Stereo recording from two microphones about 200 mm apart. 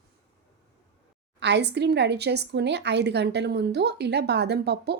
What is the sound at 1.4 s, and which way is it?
Speech, 60° right (ahead or behind).